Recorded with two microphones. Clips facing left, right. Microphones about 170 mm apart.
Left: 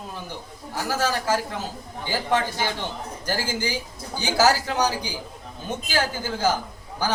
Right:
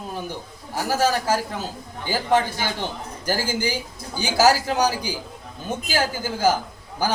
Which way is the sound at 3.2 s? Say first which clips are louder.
Right 3 dB; 10° right (ahead or behind).